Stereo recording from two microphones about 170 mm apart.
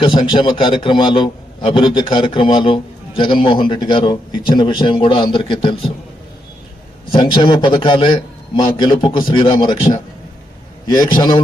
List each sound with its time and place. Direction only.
0.0 s a man's voice: 30° left (ahead or behind)
7.2 s a man's voice: 25° left (ahead or behind)
11.0 s a man's voice: 25° left (ahead or behind)